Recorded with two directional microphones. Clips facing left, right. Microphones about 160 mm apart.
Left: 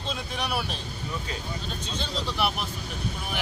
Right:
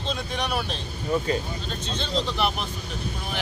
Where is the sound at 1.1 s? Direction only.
45° right (ahead or behind).